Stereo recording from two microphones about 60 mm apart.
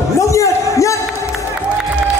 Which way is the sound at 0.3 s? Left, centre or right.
Left.